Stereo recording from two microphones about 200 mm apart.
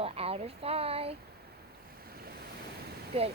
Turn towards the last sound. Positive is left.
turn(degrees=-30)  # may be behind; listen again after turning